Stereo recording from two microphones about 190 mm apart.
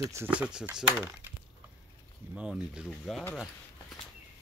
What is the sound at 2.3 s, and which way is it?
Speech, 5° right (ahead or behind).